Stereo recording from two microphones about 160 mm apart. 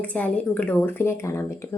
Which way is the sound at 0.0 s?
10° left (ahead or behind).